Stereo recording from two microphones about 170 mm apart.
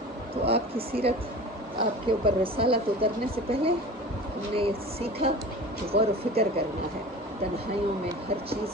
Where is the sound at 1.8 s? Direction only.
30° right (ahead or behind).